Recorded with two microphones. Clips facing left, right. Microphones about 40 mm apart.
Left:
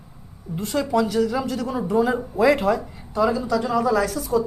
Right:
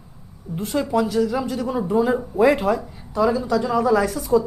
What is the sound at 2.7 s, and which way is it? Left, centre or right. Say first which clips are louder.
Speech: right 1 dB; left.